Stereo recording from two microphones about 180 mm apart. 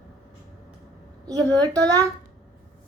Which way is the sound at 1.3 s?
20° right (ahead or behind).